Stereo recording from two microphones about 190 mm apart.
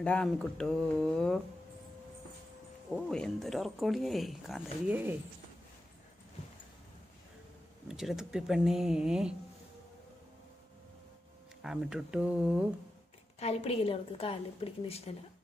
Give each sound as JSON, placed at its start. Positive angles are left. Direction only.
{"t": 0.0, "sound": "speech", "side_deg": 5}
{"t": 2.9, "sound": "speech", "side_deg": 0}
{"t": 7.9, "sound": "speech", "side_deg": 0}
{"t": 11.6, "sound": "speech", "side_deg": -5}
{"t": 13.4, "sound": "a woman's voice", "side_deg": 35}